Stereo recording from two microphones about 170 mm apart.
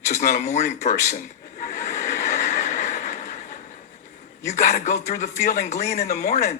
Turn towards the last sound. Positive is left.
turn(degrees=45)  # may be behind; listen again after turning